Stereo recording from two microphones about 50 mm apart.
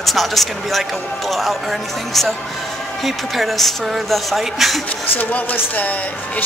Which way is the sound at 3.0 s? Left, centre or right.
Centre.